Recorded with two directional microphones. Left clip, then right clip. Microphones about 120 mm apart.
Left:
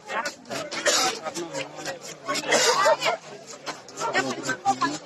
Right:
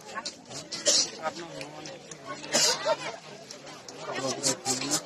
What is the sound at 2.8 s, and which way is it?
Speech, 20° left (ahead or behind).